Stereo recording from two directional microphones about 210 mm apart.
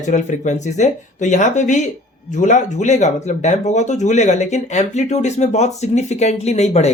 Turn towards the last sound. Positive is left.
turn(degrees=30)  # may be behind; listen again after turning